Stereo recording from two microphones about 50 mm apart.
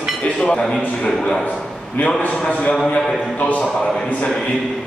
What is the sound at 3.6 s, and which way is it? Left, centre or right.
Speech, centre.